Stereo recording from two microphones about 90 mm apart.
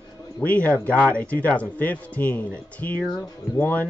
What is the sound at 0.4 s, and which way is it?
Speech, 15° left (ahead or behind).